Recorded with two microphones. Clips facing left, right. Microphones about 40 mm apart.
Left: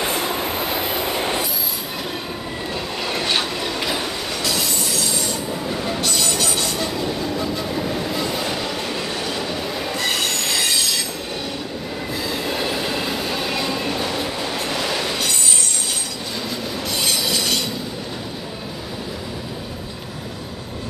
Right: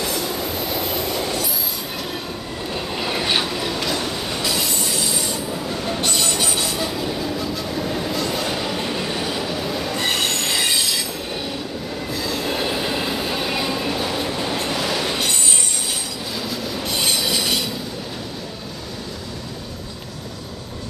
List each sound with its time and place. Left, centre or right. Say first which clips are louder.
0.0 s train: left 2 dB; left
2.7 s train: right 1 dB; centre
4.3 s train: even; centre
9.9 s train wheels squealing: even; right
10.3 s train wheels squealing: even; centre
12.1 s train: even; centre
12.4 s train: right 1 dB; centre
16.3 s train: even; centre
16.8 s train: right 1 dB; centre